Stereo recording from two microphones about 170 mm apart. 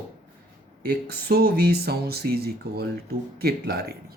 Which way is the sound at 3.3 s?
65° right (ahead or behind).